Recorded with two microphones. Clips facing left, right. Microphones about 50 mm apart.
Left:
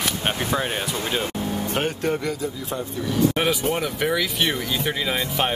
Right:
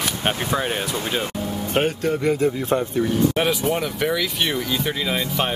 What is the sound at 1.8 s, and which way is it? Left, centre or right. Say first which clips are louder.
Speech: right 5 dB; right.